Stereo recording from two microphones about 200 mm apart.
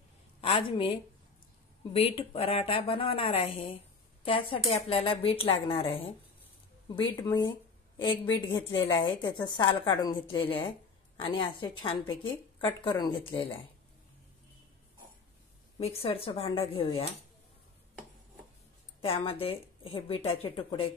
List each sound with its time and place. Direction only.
0.4 s a woman's voice: 25° left (ahead or behind)
2.0 s a woman's voice: 30° left (ahead or behind)
7.0 s a woman's voice: 20° left (ahead or behind)
15.8 s a woman's voice: 30° left (ahead or behind)
18.9 s a woman's voice: 25° left (ahead or behind)